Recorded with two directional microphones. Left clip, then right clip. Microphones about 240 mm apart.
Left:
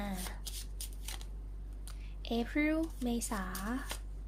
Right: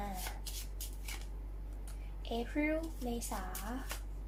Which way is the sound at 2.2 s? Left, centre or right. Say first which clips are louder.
Left 3 dB; left.